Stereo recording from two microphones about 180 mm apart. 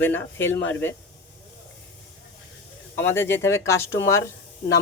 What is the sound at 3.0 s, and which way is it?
Speech, 15° left (ahead or behind).